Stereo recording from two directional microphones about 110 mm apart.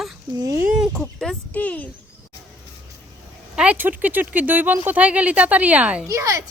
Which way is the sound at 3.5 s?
10° right (ahead or behind).